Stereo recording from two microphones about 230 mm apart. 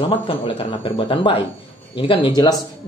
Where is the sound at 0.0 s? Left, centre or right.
Left.